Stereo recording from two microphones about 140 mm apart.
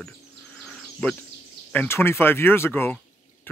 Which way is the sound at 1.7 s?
15° left (ahead or behind).